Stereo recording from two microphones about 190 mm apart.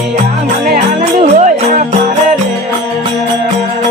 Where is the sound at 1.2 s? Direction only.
35° right (ahead or behind).